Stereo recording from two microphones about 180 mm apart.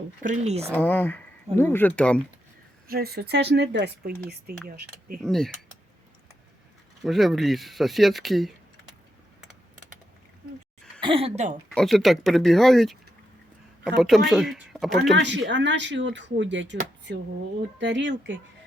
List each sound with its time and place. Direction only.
0.2 s speech: 45° right (ahead or behind)
0.7 s speech: 10° left (ahead or behind)
2.8 s speech: 55° right (ahead or behind)
4.7 s speech: 55° right (ahead or behind)
5.2 s speech: centre (ahead or behind)
7.0 s speech: centre (ahead or behind)
11.0 s speech: 30° right (ahead or behind)
11.7 s speech: centre (ahead or behind)
14.0 s speech: centre (ahead or behind)
15.1 s speech: 85° right
17.7 s speech: 80° right